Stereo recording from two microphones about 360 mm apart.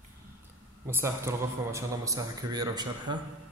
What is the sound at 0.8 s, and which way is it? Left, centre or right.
A man's voice, centre.